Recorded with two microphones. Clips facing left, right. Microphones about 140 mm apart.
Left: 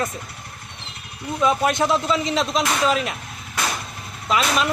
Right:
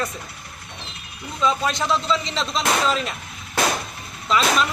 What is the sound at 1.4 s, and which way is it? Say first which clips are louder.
Speech: left 3 dB; 15° left (ahead or behind).